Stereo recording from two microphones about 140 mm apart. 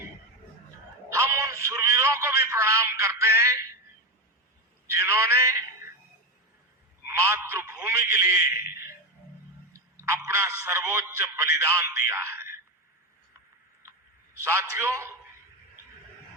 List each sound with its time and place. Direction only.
1.1 s music: 20° right (ahead or behind)
1.6 s a man's voice: 20° right (ahead or behind)
4.9 s a man's voice: 20° right (ahead or behind)
7.1 s a man's voice: 20° right (ahead or behind)
10.0 s a man's voice: 20° right (ahead or behind)
14.4 s a man's voice: 20° right (ahead or behind)